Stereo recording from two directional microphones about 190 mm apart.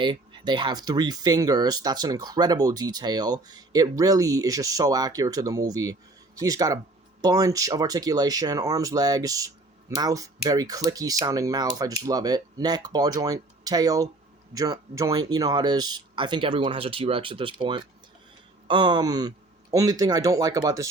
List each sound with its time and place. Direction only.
0.0 s speech: 25° right (ahead or behind)